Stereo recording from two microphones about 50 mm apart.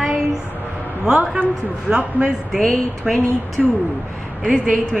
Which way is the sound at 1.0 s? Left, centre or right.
Centre.